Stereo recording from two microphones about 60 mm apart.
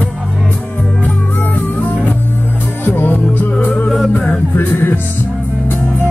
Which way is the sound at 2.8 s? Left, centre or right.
Left.